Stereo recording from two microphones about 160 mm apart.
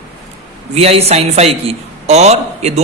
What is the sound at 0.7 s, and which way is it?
A man's voice, 40° right (ahead or behind).